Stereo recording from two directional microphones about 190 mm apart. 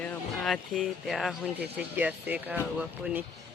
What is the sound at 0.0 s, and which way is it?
Speech, 5° left (ahead or behind).